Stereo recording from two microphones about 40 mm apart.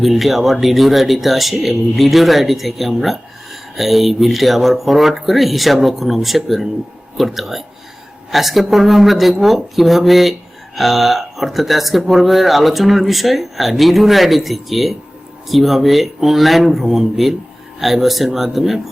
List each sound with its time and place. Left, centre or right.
0.0 s speech: centre